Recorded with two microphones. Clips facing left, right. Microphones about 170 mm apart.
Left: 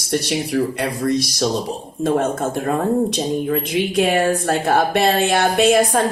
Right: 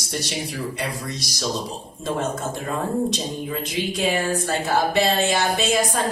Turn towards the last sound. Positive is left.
turn(degrees=55)  # may be behind; listen again after turning